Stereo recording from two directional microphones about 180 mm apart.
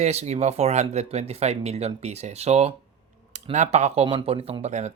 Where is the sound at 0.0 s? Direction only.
35° right (ahead or behind).